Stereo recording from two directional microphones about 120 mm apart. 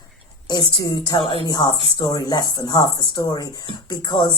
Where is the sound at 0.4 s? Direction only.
35° left (ahead or behind).